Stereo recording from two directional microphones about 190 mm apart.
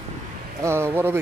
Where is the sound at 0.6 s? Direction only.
15° right (ahead or behind).